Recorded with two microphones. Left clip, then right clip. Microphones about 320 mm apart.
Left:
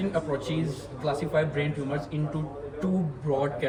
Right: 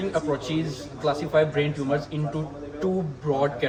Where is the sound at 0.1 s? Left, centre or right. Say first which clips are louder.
Right 4 dB; centre.